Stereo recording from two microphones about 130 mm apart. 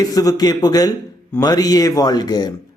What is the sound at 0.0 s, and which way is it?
Speech, 30° left (ahead or behind).